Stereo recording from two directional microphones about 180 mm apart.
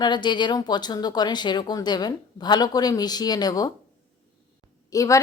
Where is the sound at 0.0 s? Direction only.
25° left (ahead or behind).